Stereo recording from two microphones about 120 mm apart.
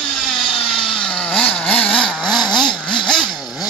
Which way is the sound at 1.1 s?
5° left (ahead or behind).